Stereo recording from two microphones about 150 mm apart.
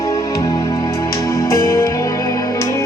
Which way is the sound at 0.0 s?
20° left (ahead or behind).